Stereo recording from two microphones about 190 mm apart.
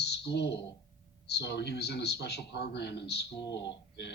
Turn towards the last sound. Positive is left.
turn(degrees=65)  # may be behind; listen again after turning